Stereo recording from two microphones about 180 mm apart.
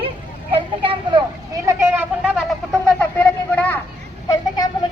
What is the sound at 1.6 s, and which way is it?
Cat, 15° right (ahead or behind).